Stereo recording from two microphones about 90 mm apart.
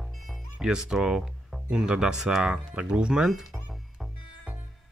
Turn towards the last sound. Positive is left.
turn(degrees=-10)  # may be behind; listen again after turning